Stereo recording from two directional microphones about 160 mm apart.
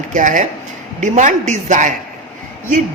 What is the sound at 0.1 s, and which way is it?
A man's voice, 55° right (ahead or behind).